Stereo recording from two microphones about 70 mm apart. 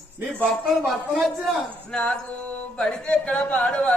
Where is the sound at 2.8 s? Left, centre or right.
Centre.